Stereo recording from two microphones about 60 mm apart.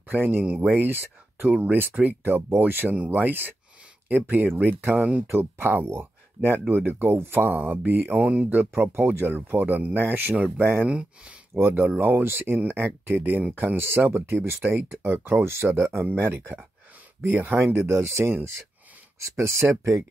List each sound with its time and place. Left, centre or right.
0.1 s speech: right
0.4 s speech: right
0.7 s speech: right
5.3 s speech: right
10.3 s speech: right
12.0 s speech: right
17.7 s speech: right
19.3 s speech: right